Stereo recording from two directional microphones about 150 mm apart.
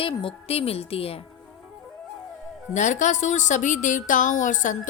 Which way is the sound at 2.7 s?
55° left (ahead or behind).